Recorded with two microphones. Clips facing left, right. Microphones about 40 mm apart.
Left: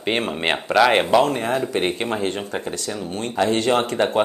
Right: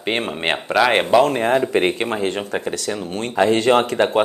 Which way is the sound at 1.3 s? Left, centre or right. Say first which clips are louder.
Right 5 dB; right.